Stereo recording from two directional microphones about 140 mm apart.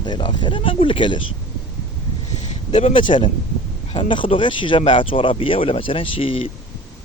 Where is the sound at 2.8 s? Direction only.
40° left (ahead or behind).